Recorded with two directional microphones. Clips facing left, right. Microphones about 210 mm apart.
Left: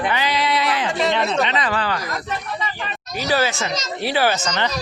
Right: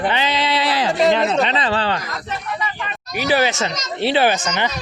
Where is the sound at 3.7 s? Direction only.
30° left (ahead or behind).